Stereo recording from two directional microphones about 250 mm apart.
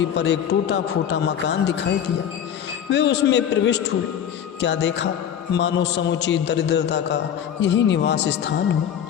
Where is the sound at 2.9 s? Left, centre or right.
Left.